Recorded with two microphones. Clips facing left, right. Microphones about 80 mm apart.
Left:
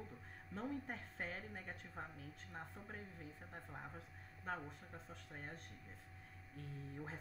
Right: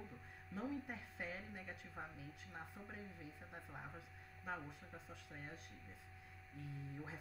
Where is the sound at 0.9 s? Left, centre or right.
Left.